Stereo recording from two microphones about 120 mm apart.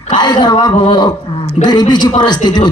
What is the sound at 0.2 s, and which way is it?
A man's voice, 35° left (ahead or behind).